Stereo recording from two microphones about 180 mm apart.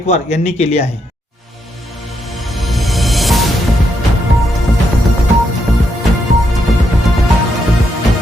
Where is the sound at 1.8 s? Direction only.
Centre (ahead or behind).